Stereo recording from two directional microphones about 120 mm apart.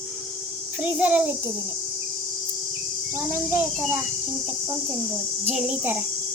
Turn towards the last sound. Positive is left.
turn(degrees=-10)  # may be behind; listen again after turning